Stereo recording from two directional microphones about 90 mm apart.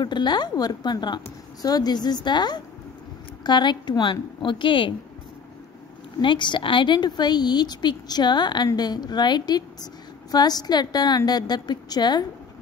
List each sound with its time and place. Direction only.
0.0 s a woman's voice: 55° left (ahead or behind)
6.2 s speech: 60° left (ahead or behind)